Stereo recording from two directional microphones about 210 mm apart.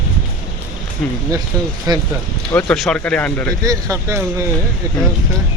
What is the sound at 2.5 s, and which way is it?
Speech, 5° left (ahead or behind).